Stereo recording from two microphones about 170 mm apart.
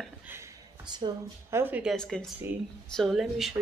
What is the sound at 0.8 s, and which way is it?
Speech, 25° right (ahead or behind).